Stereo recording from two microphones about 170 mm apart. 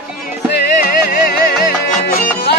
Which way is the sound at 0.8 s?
55° left (ahead or behind).